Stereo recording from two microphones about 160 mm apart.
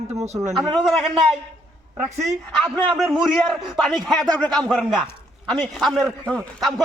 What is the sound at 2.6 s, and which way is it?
A man's voice, centre (ahead or behind).